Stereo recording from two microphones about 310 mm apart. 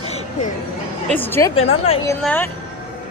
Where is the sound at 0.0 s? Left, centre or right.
Centre.